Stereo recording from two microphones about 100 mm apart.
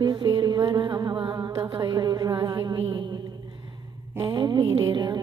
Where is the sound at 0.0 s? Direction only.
50° right (ahead or behind).